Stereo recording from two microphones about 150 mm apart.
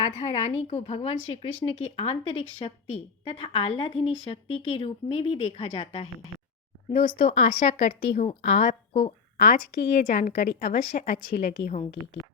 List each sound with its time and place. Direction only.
0.0 s a woman's voice: 50° left (ahead or behind)
9.7 s a woman's voice: 90° left